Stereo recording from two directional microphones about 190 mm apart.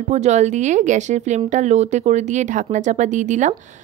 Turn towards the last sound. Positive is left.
turn(degrees=-40)  # may be behind; listen again after turning